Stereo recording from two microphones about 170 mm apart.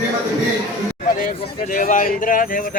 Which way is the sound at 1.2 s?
55° left (ahead or behind).